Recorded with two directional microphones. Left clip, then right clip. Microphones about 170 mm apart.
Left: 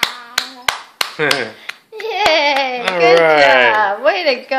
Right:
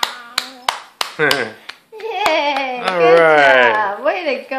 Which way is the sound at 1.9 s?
45° left (ahead or behind).